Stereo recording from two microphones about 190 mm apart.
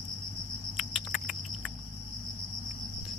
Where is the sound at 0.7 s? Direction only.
Centre (ahead or behind).